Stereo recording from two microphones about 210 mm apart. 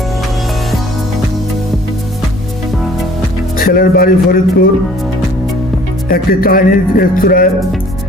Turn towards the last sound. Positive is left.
turn(degrees=45)  # may be behind; listen again after turning